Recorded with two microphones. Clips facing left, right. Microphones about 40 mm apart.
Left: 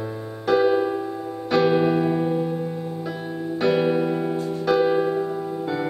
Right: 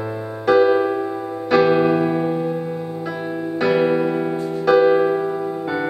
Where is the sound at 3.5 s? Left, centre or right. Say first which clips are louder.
Right 3 dB; centre.